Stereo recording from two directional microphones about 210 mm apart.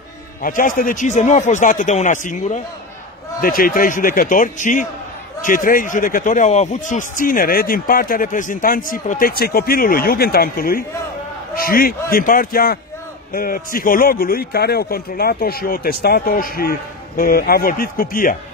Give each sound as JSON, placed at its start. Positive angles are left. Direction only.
{"t": 0.4, "sound": "a man's voice", "side_deg": 40}